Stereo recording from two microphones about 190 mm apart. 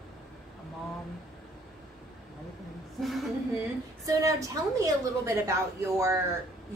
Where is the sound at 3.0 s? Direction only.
Centre (ahead or behind).